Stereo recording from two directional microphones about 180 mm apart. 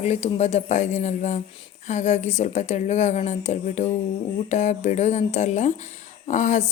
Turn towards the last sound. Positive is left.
turn(degrees=40)  # may be behind; listen again after turning